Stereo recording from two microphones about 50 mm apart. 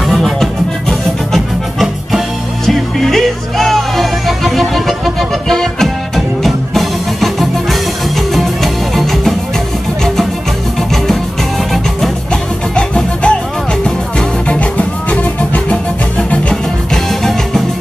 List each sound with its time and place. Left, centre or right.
0.0 s music: centre
12.3 s music: centre
16.9 s music: centre